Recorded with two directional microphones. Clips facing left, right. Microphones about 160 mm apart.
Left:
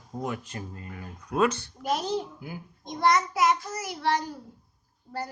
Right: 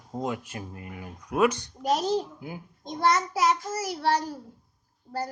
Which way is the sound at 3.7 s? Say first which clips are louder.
Right 2 dB; 40° right (ahead or behind).